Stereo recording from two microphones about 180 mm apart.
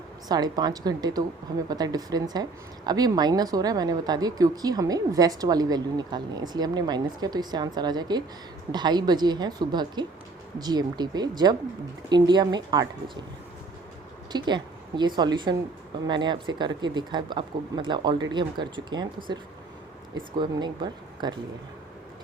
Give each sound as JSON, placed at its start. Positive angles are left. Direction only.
{"t": 0.3, "sound": "speech", "side_deg": -20}
{"t": 14.3, "sound": "speech", "side_deg": -25}